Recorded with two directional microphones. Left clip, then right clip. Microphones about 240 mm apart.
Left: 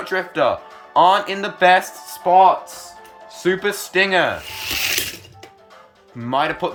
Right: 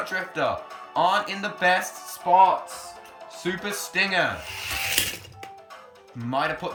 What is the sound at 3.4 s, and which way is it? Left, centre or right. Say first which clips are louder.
Speech: left 10 dB; centre.